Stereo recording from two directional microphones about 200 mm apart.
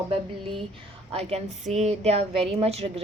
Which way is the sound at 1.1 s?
35° right (ahead or behind).